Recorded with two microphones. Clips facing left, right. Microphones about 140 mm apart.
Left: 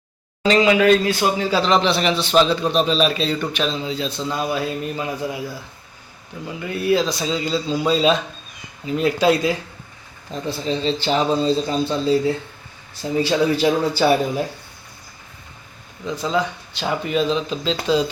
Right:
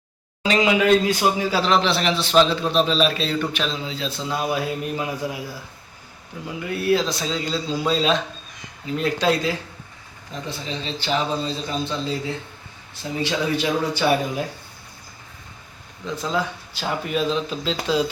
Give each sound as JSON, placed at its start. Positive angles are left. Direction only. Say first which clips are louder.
{"t": 0.4, "sound": "speech", "louder": "left 4 dB", "side_deg": -10}
{"t": 6.7, "sound": "speech", "louder": "left 2 dB", "side_deg": 0}
{"t": 10.4, "sound": "a man's voice", "louder": "left 9 dB", "side_deg": 35}
{"t": 16.0, "sound": "speech", "louder": "left 3 dB", "side_deg": 0}